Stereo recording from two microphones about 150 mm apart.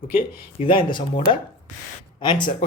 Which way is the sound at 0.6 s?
35° left (ahead or behind).